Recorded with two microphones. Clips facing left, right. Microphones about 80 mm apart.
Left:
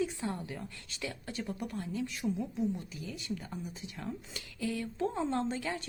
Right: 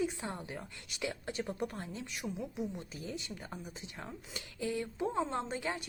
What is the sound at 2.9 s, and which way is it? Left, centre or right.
A woman's voice, right.